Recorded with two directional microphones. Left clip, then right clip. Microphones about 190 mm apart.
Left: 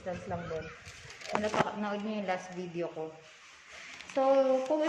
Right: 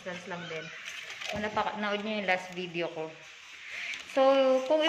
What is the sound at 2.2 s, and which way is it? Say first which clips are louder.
Speech: right 5 dB; centre (ahead or behind).